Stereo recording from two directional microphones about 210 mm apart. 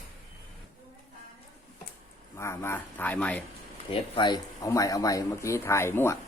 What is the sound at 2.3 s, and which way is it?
Speech, 15° left (ahead or behind).